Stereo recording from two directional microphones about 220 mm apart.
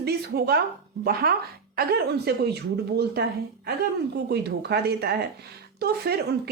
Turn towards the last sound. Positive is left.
turn(degrees=-45)  # may be behind; listen again after turning